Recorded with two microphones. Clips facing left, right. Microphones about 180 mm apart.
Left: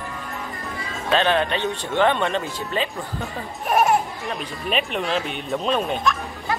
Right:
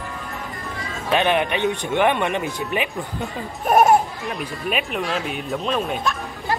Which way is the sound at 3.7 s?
40° right (ahead or behind).